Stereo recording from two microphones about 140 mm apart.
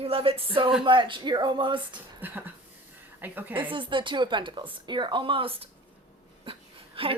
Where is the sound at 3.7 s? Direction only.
35° right (ahead or behind).